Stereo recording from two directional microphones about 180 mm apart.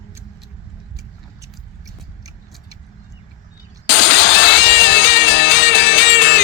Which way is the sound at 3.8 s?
80° left.